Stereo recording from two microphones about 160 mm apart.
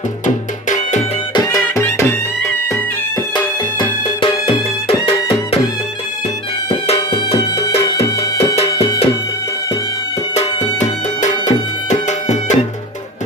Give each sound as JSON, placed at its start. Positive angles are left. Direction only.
{"t": 0.7, "sound": "music", "side_deg": 50}
{"t": 1.3, "sound": "music", "side_deg": 20}
{"t": 3.3, "sound": "music", "side_deg": 30}
{"t": 6.7, "sound": "music", "side_deg": 40}
{"t": 10.3, "sound": "music", "side_deg": 45}